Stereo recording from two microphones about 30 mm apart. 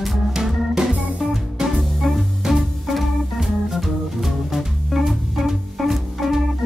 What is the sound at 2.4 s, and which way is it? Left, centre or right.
Music, centre.